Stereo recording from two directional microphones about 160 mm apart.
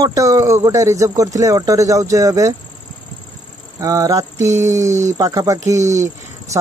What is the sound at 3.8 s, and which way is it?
Speech, 20° right (ahead or behind).